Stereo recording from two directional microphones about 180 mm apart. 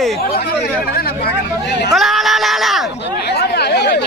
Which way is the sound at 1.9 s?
Centre (ahead or behind).